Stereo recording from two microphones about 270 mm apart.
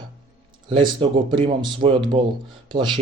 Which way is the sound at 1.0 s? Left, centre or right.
Centre.